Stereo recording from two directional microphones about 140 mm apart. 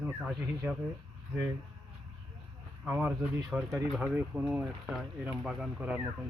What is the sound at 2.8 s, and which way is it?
Speech, 10° right (ahead or behind).